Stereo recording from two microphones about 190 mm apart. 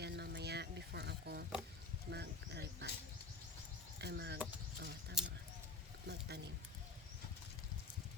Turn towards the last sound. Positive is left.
turn(degrees=-60)  # may be behind; listen again after turning